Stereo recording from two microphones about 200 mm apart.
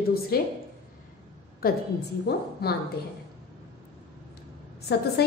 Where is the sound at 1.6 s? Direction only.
45° left (ahead or behind).